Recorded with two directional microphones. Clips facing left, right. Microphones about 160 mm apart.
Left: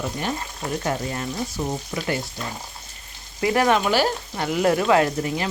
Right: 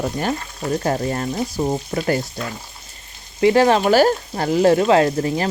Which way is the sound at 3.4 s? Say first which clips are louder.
Right 5 dB; 30° right (ahead or behind).